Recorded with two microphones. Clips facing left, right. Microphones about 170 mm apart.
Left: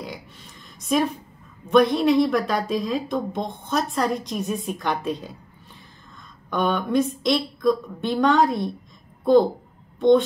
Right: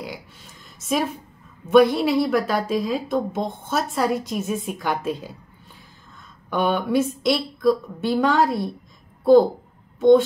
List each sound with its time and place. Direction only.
0.7 s a woman's voice: 5° right (ahead or behind)
6.5 s a woman's voice: 5° right (ahead or behind)
9.9 s speech: 5° right (ahead or behind)